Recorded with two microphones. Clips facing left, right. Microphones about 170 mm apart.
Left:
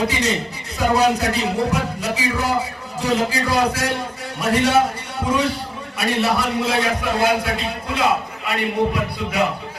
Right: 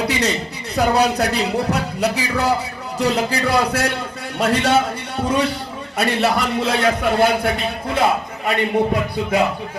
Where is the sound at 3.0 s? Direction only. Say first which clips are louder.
Right 1 dB; 65° right (ahead or behind).